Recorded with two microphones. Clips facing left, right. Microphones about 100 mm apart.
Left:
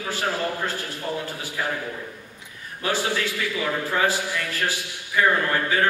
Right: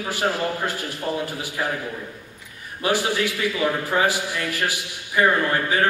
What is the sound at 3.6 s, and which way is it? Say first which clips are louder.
Speech: right 2 dB; 20° right (ahead or behind).